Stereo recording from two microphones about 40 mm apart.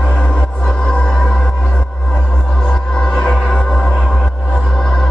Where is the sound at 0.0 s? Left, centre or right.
Left.